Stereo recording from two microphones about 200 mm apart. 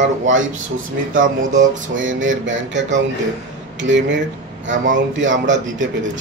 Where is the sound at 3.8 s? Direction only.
65° right (ahead or behind).